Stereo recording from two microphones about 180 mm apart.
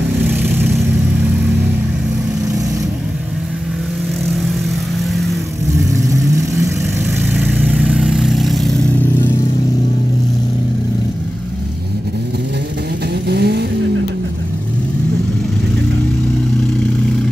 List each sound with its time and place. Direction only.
0.3 s vehicle: 10° right (ahead or behind)
6.1 s vehicle: 15° right (ahead or behind); by 8.8 s centre (ahead or behind)
13.3 s vehicle: 65° right (ahead or behind)